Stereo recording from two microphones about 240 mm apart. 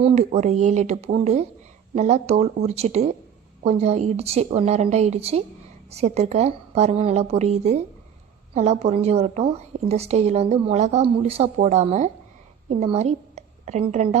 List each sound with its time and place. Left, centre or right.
0.0 s a woman's voice: right